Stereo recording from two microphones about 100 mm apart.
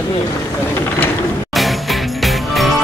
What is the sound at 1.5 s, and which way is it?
Music, centre (ahead or behind).